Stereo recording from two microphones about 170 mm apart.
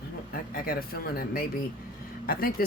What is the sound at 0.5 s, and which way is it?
Speech, 60° left (ahead or behind).